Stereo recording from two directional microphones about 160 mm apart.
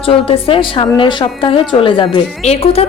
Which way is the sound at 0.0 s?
35° left (ahead or behind).